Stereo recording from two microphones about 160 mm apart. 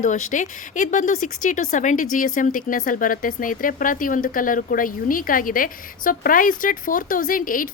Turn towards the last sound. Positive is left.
turn(degrees=60)  # may be behind; listen again after turning